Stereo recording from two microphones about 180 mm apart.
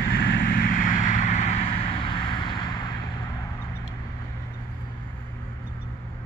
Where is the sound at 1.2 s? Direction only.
40° left (ahead or behind).